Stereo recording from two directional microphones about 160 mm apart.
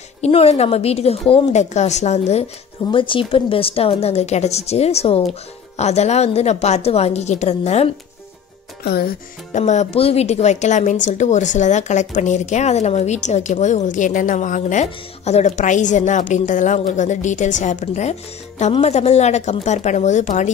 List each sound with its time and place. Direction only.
0.2 s a woman's voice: 40° left (ahead or behind)
8.8 s music: 75° left (ahead or behind)
9.5 s speech: 45° left (ahead or behind)